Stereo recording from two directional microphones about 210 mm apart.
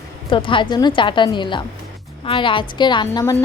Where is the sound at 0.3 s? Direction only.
25° left (ahead or behind).